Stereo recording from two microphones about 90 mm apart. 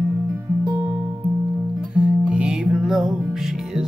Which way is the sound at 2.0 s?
10° right (ahead or behind).